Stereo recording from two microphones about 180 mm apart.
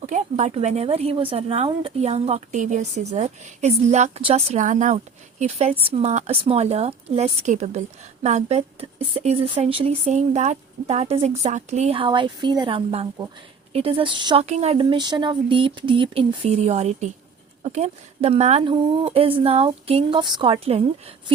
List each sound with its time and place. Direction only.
0.0 s speech: 40° right (ahead or behind)
14.4 s speech: 35° right (ahead or behind)